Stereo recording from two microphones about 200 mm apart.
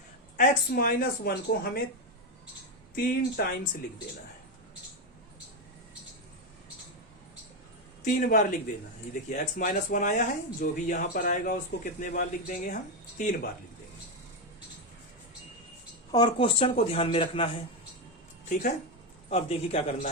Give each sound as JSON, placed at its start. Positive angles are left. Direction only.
{"t": 0.3, "sound": "a woman's voice", "side_deg": 45}
{"t": 2.9, "sound": "a woman's voice", "side_deg": 45}
{"t": 8.0, "sound": "speech", "side_deg": 40}
{"t": 16.1, "sound": "speech", "side_deg": 25}
{"t": 19.3, "sound": "speech", "side_deg": 30}